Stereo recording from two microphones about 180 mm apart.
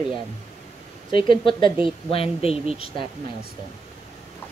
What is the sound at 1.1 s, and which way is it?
Speech, 30° left (ahead or behind).